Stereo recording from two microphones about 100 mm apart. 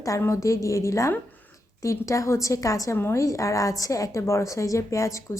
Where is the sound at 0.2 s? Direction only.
30° left (ahead or behind).